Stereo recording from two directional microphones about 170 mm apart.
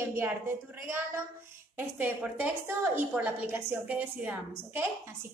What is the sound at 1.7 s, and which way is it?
A woman's voice, 10° right (ahead or behind).